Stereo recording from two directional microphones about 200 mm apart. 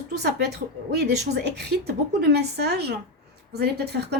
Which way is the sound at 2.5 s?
55° right (ahead or behind).